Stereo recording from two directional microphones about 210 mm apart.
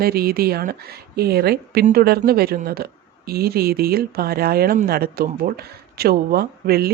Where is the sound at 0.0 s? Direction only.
45° right (ahead or behind).